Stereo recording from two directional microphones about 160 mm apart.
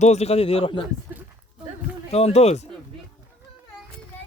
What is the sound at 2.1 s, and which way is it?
Speech, 40° left (ahead or behind).